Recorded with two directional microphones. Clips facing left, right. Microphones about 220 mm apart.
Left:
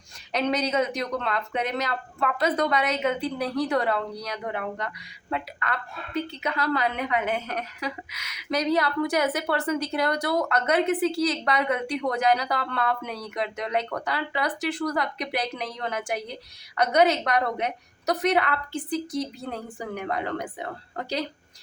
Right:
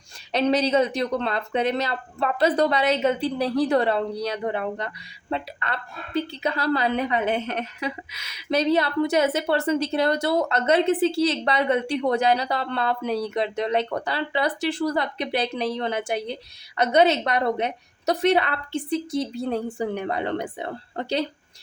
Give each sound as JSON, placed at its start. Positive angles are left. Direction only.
{"t": 0.3, "sound": "a woman's voice", "side_deg": -30}